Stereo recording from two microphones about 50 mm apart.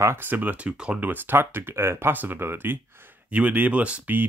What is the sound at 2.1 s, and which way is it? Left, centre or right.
Speech, right.